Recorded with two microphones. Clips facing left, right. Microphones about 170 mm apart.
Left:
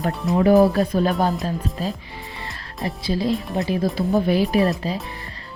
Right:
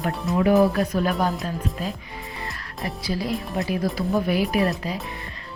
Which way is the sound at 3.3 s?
Centre (ahead or behind).